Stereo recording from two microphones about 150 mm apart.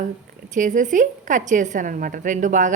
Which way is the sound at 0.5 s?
60° right (ahead or behind).